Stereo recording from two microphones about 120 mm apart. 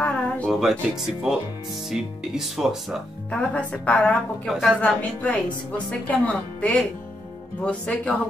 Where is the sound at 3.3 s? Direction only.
10° left (ahead or behind).